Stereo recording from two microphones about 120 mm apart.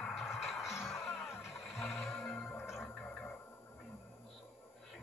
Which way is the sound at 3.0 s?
10° left (ahead or behind).